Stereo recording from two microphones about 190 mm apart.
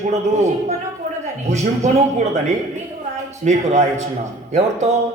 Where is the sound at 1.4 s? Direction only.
35° right (ahead or behind).